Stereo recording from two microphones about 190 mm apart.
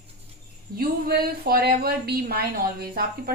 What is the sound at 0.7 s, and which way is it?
A woman's voice, 50° right (ahead or behind).